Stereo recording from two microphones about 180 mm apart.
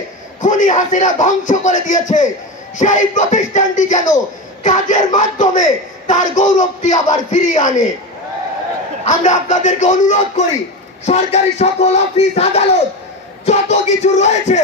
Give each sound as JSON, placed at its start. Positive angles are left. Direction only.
{"t": 0.4, "sound": "a man's voice", "side_deg": 45}
{"t": 9.0, "sound": "a man's voice", "side_deg": 45}
{"t": 11.1, "sound": "a sound", "side_deg": 40}